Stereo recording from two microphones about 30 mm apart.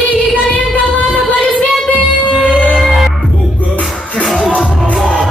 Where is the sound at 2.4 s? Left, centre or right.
Left.